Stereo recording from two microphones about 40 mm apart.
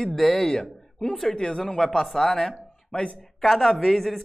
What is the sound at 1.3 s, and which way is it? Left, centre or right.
Speech, left.